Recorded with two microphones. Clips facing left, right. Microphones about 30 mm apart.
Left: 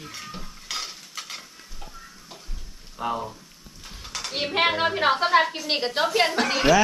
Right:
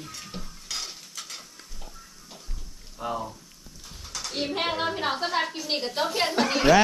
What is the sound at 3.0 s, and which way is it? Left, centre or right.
Speech, left.